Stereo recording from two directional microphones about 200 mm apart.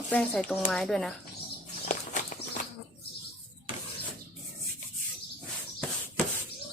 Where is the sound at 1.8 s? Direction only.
40° left (ahead or behind).